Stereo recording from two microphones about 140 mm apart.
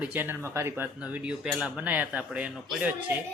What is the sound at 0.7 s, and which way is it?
Speech, 5° right (ahead or behind).